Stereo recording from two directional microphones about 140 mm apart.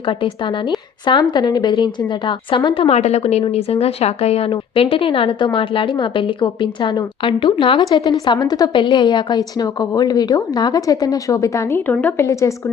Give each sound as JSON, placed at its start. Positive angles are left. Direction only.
{"t": 1.0, "sound": "a woman's voice", "side_deg": 30}